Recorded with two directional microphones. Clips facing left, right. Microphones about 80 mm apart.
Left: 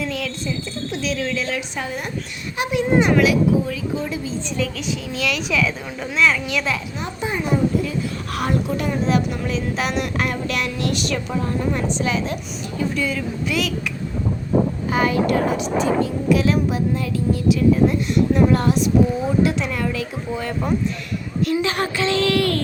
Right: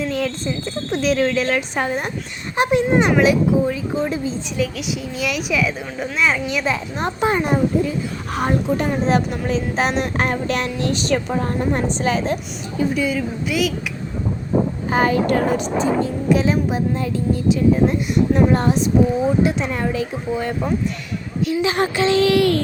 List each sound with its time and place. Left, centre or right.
0.0 s a woman's voice: right
4.5 s a woman's voice: centre
7.0 s a child's voice: right
7.9 s speech: right
8.8 s a woman's voice: right
12.9 s a woman's voice: centre
14.8 s a woman's voice: right
16.3 s speech: right
21.5 s a woman's voice: centre